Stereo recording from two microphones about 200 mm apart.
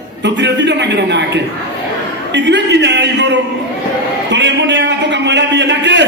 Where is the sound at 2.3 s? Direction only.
60° right (ahead or behind).